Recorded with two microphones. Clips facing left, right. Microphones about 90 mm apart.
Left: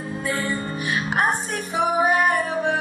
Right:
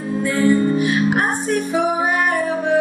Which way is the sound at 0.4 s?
20° right (ahead or behind).